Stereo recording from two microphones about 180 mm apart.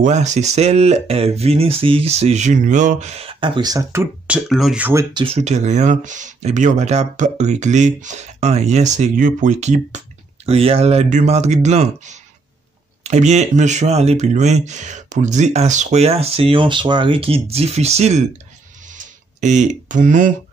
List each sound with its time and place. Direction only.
0.0 s speech: 40° right (ahead or behind); by 4.4 s 15° right (ahead or behind)
4.5 s speech: centre (ahead or behind)
5.1 s speech: 30° right (ahead or behind)
18.9 s a sound: 45° right (ahead or behind)